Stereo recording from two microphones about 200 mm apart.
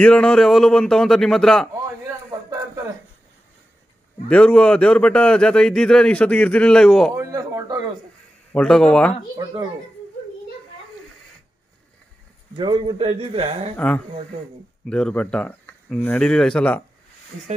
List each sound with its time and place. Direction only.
0.0 s a man's voice: 5° left (ahead or behind)
4.3 s a man's voice: 5° left (ahead or behind)
7.2 s speech: 15° right (ahead or behind)
8.5 s a man's voice: 5° left (ahead or behind)
12.5 s speech: 25° right (ahead or behind)
13.7 s a man's voice: 5° left (ahead or behind)